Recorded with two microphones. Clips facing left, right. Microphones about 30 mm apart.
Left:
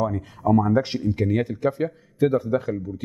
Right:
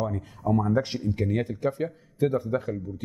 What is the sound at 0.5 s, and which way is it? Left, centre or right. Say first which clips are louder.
Speech: left 5 dB; left.